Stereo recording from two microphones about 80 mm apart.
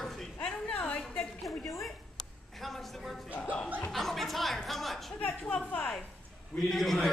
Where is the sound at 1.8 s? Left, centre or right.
Centre.